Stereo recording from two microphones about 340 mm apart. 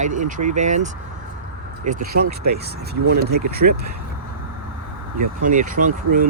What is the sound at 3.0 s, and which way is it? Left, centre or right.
Speech, right.